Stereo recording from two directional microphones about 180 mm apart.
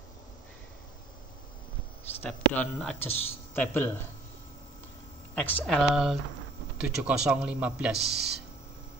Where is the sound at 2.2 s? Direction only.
5° left (ahead or behind).